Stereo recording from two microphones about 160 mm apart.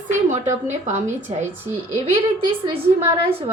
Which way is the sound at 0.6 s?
45° right (ahead or behind).